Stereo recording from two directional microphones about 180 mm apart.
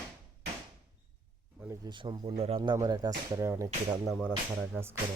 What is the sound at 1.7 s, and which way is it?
Speech, 25° right (ahead or behind).